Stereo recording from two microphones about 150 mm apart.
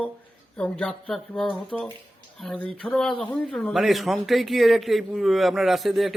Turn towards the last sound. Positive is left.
turn(degrees=0)  # may be behind; listen again after turning